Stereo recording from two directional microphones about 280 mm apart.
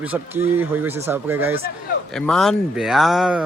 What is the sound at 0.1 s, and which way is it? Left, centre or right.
Speech, centre.